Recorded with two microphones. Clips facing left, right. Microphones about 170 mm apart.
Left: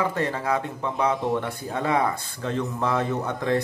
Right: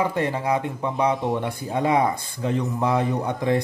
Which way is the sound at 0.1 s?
15° right (ahead or behind).